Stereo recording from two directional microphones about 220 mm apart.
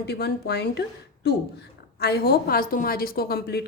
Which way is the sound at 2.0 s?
45° left (ahead or behind).